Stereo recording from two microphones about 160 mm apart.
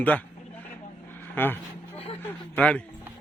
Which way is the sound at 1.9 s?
35° left (ahead or behind).